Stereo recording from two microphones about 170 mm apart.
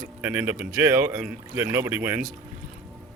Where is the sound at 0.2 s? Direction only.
10° right (ahead or behind).